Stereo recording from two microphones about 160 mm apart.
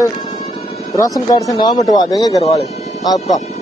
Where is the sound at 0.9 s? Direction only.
20° left (ahead or behind).